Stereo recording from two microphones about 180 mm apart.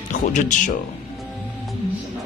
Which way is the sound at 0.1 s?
45° left (ahead or behind).